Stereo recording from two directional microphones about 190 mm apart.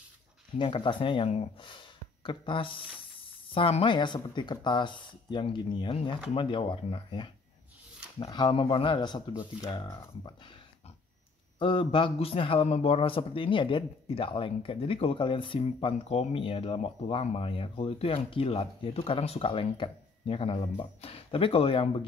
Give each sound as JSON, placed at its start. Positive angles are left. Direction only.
{"t": 0.6, "sound": "a man's voice", "side_deg": 25}
{"t": 11.5, "sound": "a man's voice", "side_deg": 25}